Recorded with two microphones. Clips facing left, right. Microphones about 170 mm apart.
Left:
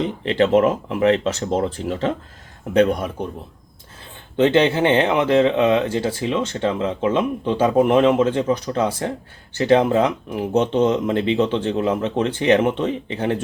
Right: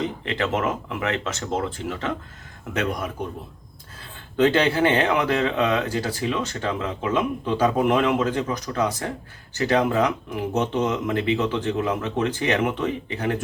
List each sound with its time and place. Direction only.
0.3 s speech: 30° left (ahead or behind)
4.4 s speech: 25° left (ahead or behind)